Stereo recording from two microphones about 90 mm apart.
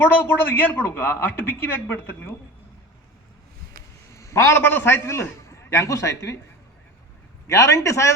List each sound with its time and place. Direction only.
0.0 s speech: 25° left (ahead or behind)
4.1 s a man's voice: 30° left (ahead or behind)
7.4 s a man's voice: 35° left (ahead or behind)